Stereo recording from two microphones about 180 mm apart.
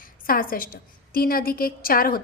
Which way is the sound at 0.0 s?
50° left (ahead or behind).